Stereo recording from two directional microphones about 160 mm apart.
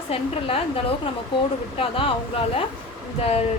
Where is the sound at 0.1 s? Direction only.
35° left (ahead or behind).